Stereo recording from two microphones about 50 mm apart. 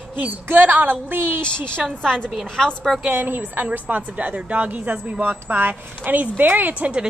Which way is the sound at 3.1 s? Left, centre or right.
Right.